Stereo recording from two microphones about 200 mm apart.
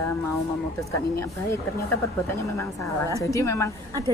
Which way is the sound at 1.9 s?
15° left (ahead or behind).